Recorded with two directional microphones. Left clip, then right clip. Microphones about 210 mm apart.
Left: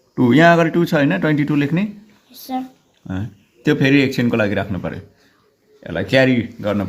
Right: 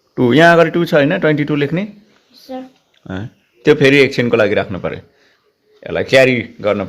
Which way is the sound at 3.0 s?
20° right (ahead or behind).